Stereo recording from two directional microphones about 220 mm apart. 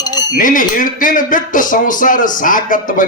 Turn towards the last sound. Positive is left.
turn(degrees=35)  # may be behind; listen again after turning